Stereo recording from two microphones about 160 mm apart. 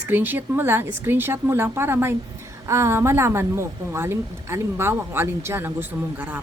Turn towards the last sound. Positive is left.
turn(degrees=-10)  # may be behind; listen again after turning